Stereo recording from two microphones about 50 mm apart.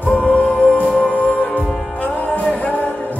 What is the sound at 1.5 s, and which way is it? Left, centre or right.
Music, left.